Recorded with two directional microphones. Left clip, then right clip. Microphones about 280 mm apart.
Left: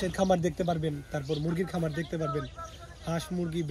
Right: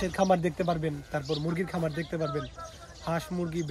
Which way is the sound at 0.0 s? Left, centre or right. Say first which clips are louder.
Right 1 dB; centre.